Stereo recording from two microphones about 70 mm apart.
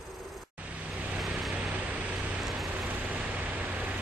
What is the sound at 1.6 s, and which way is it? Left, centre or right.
Vehicle, centre.